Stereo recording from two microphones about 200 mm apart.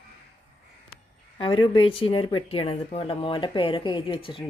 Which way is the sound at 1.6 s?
25° left (ahead or behind).